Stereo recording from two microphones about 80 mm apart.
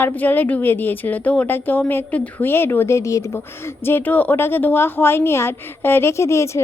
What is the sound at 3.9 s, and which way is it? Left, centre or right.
A woman's voice, left.